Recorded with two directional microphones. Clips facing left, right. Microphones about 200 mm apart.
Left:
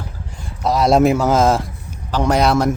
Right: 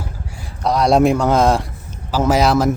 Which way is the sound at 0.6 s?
Centre (ahead or behind).